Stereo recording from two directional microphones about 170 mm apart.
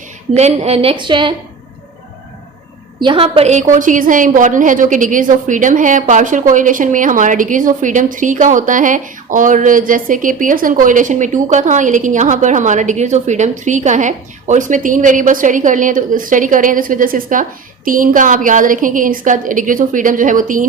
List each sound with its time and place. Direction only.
0.3 s a woman's voice: 40° right (ahead or behind)
3.0 s a woman's voice: 30° right (ahead or behind); by 20.7 s 50° right (ahead or behind)